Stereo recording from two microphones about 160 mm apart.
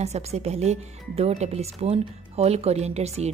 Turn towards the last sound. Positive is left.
turn(degrees=-40)  # may be behind; listen again after turning